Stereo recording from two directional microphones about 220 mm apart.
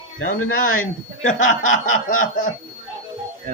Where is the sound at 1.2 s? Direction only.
35° left (ahead or behind).